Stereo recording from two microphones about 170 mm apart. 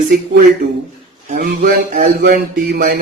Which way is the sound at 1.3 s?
65° right (ahead or behind).